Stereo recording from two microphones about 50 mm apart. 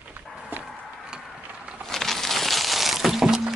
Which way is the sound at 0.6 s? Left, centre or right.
Centre.